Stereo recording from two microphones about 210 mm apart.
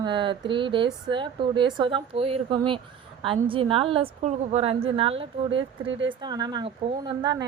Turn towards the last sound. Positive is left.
turn(degrees=-20)  # may be behind; listen again after turning